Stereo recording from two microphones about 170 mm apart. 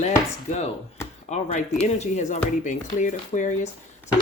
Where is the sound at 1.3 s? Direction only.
45° left (ahead or behind).